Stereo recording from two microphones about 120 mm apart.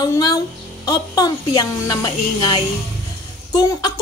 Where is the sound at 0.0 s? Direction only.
35° left (ahead or behind).